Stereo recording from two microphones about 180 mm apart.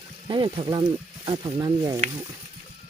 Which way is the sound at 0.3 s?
25° right (ahead or behind).